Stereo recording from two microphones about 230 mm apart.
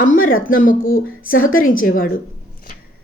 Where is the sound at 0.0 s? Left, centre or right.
Left.